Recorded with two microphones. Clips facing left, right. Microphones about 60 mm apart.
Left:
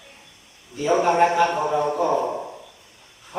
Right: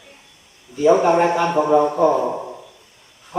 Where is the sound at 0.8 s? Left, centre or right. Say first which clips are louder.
Right 4 dB; centre.